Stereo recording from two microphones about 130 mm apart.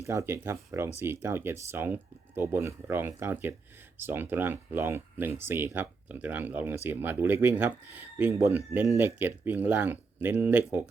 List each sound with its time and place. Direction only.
0.0 s speech: 25° right (ahead or behind)